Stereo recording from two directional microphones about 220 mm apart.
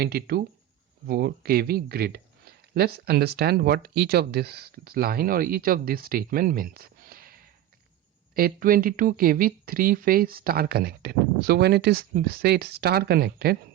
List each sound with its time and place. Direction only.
0.0 s speech: 45° right (ahead or behind)